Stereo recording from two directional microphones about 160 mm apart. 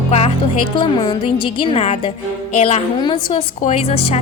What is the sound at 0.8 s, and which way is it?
A woman's voice, 30° left (ahead or behind).